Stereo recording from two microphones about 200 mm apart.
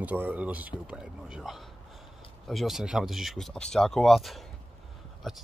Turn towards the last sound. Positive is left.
turn(degrees=0)  # may be behind; listen again after turning